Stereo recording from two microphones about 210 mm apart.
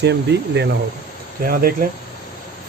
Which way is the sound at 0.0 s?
55° right (ahead or behind).